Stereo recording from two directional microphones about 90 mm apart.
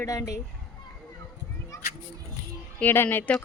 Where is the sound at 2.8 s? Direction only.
25° left (ahead or behind).